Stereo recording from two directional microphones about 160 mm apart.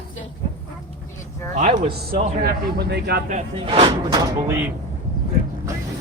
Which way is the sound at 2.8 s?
90° right.